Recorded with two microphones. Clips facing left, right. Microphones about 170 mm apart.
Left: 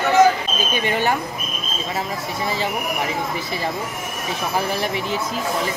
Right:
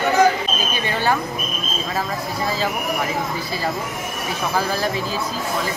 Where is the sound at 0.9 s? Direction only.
20° left (ahead or behind).